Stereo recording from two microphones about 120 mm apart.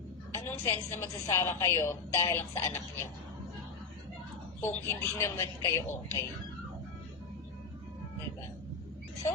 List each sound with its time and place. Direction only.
0.3 s a woman's voice: 20° left (ahead or behind)
4.6 s a woman's voice: 20° left (ahead or behind)